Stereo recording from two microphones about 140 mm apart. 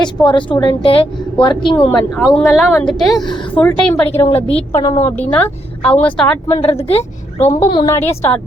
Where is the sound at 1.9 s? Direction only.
Centre (ahead or behind).